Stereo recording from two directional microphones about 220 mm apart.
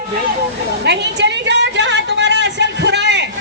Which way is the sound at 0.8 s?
50° right (ahead or behind).